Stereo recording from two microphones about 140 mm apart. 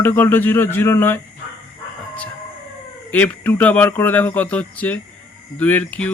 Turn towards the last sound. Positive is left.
turn(degrees=10)  # may be behind; listen again after turning